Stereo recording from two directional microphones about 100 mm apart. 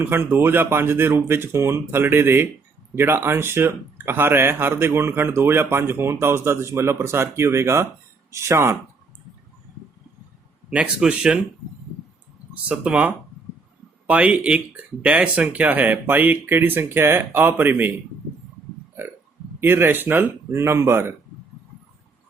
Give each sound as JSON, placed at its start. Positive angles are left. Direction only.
{"t": 0.0, "sound": "speech", "side_deg": -20}
{"t": 10.7, "sound": "speech", "side_deg": -10}
{"t": 12.6, "sound": "speech", "side_deg": -10}
{"t": 19.5, "sound": "speech", "side_deg": -20}